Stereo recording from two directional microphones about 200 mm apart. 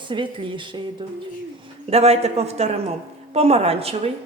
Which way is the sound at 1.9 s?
30° right (ahead or behind).